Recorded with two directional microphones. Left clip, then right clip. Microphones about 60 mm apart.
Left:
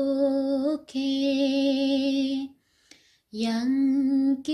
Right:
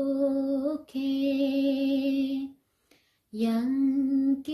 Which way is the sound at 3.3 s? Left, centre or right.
Right.